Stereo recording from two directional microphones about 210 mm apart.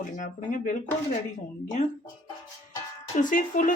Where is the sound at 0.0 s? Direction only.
40° left (ahead or behind).